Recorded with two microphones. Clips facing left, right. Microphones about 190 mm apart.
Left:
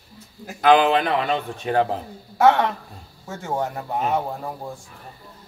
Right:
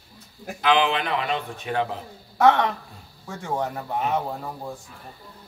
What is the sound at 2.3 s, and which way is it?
Speech, centre (ahead or behind).